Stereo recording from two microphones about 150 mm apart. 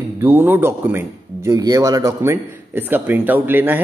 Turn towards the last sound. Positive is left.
turn(degrees=-10)  # may be behind; listen again after turning